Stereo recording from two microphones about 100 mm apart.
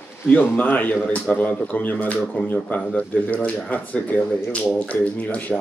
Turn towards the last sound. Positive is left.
turn(degrees=15)  # may be behind; listen again after turning